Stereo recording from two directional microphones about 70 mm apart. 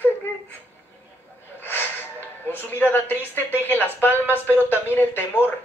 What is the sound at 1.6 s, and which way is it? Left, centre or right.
Snort, left.